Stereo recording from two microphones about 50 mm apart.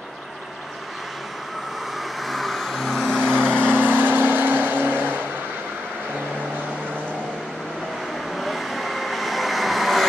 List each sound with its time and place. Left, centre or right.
2.2 s vehicle: centre
3.2 s vehicle: centre
3.7 s vehicle: right
8.4 s vehicle: centre